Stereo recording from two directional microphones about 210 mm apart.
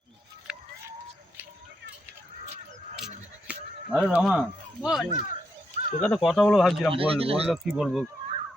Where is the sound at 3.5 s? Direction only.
5° right (ahead or behind).